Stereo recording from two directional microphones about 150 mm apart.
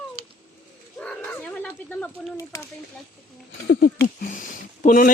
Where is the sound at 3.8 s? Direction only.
65° left (ahead or behind).